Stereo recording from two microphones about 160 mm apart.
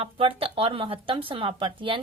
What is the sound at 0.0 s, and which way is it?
A woman's voice, 35° right (ahead or behind).